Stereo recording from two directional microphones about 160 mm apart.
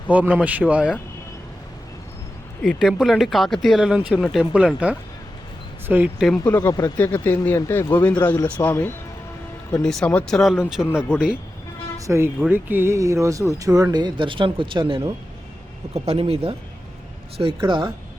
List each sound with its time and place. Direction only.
0.1 s speech: 10° right (ahead or behind)
2.6 s speech: centre (ahead or behind)
6.2 s speech: centre (ahead or behind)
6.5 s speech: 20° left (ahead or behind)
7.0 s speech: 10° left (ahead or behind)
11.9 s speech: 20° right (ahead or behind)